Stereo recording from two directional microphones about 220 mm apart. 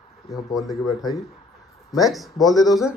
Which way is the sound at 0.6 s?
Centre (ahead or behind).